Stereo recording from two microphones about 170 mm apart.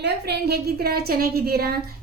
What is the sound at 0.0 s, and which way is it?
A woman's voice, 75° right (ahead or behind).